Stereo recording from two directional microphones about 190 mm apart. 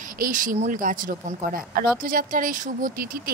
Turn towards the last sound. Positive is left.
turn(degrees=-45)  # may be behind; listen again after turning